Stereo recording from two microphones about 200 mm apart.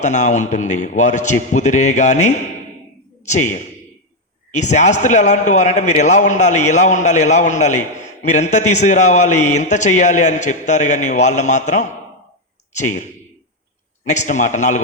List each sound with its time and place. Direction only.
0.0 s a man's voice: 35° left (ahead or behind)